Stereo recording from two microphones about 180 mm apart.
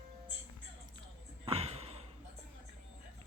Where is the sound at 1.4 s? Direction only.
35° right (ahead or behind).